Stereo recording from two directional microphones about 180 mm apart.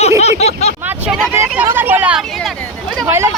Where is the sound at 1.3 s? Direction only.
10° right (ahead or behind).